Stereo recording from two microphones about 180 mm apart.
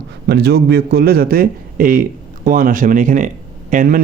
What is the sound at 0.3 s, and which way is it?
A man's voice, 65° right (ahead or behind).